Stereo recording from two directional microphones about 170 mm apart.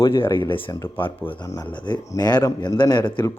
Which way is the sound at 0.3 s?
15° left (ahead or behind).